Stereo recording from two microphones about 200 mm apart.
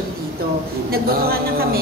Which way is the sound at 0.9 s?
50° right (ahead or behind).